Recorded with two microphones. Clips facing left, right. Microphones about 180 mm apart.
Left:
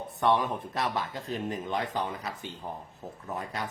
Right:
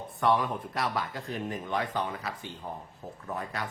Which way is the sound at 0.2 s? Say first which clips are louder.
Even; 20° left (ahead or behind).